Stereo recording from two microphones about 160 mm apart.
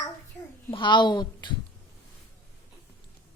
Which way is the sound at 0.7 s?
30° left (ahead or behind).